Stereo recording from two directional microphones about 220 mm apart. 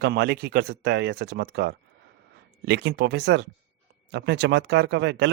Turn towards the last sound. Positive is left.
turn(degrees=-50)  # may be behind; listen again after turning